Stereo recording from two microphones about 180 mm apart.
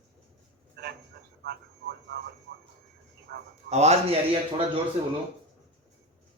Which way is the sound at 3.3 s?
65° right (ahead or behind).